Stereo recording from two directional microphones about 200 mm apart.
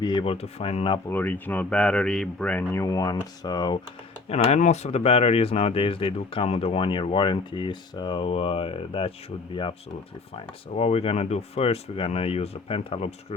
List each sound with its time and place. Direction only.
0.0 s speech: 25° left (ahead or behind)
1.0 s speech: 10° left (ahead or behind)
4.3 s speech: 35° left (ahead or behind)
10.3 s speech: 30° left (ahead or behind)